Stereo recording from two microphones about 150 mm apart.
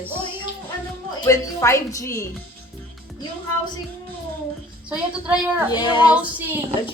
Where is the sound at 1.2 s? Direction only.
20° left (ahead or behind).